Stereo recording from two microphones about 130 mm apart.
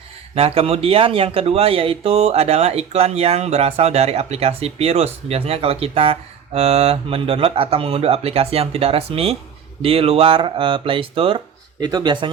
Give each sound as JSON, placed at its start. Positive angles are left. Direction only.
{"t": 0.3, "sound": "speech", "side_deg": -50}
{"t": 11.8, "sound": "speech", "side_deg": -30}